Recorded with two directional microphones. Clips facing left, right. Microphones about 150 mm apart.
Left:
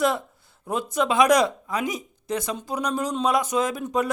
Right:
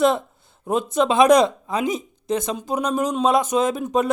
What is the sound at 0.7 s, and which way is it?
A woman's voice, 20° right (ahead or behind).